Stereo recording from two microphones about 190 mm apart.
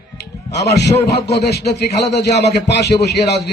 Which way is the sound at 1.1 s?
60° left (ahead or behind).